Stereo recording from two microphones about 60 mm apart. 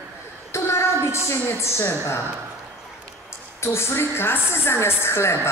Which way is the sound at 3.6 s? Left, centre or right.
Left.